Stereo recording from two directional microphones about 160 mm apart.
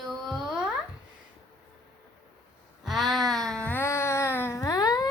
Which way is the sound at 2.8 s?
Centre (ahead or behind).